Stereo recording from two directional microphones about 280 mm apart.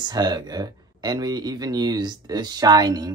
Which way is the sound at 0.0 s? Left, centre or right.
Centre.